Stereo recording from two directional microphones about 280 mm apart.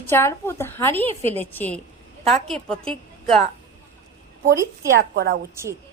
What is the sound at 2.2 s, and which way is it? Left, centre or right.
Speech, right.